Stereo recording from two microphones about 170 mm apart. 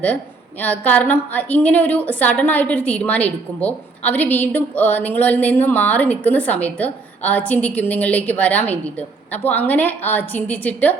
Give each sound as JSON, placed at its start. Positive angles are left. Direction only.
{"t": 0.6, "sound": "a woman's voice", "side_deg": 10}